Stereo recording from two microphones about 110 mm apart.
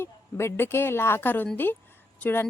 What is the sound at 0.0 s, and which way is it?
A woman's voice, 20° left (ahead or behind).